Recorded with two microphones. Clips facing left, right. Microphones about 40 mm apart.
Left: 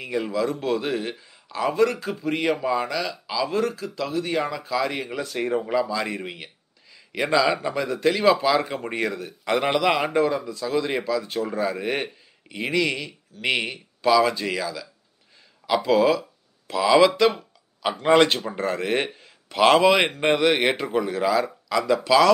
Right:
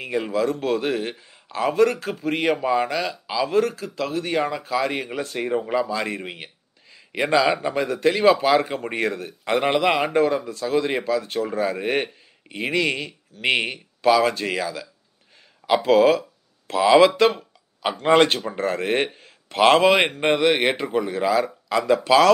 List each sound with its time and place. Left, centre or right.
0.0 s speech: right
6.2 s a sound: right
7.1 s speech: centre; by 9.3 s right
9.4 s speech: centre
10.0 s speech: right
16.2 s a sound: right
18.1 s speech: right